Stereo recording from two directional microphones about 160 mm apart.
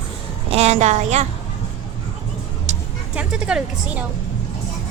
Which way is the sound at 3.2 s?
5° right (ahead or behind).